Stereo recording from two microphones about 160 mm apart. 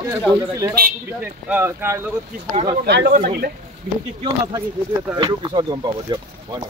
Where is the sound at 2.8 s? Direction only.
90° right; by 3.5 s 65° right (ahead or behind).